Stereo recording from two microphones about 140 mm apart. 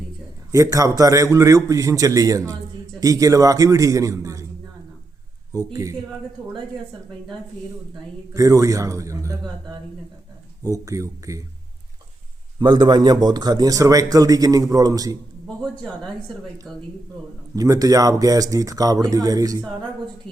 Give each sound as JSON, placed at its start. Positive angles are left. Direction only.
{"t": 0.5, "sound": "a man's voice", "side_deg": -25}
{"t": 5.5, "sound": "a man's voice", "side_deg": -25}
{"t": 8.3, "sound": "a man's voice", "side_deg": -25}
{"t": 10.6, "sound": "a man's voice", "side_deg": -25}
{"t": 12.5, "sound": "a man's voice", "side_deg": -30}
{"t": 15.8, "sound": "speech", "side_deg": 5}
{"t": 17.5, "sound": "a man's voice", "side_deg": -25}